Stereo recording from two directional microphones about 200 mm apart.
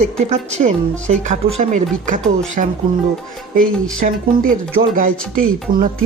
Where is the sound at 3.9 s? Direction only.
45° right (ahead or behind).